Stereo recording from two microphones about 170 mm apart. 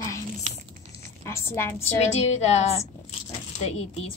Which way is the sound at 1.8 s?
40° left (ahead or behind).